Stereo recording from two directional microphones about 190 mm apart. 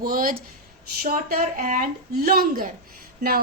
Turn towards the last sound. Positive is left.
turn(degrees=-50)  # may be behind; listen again after turning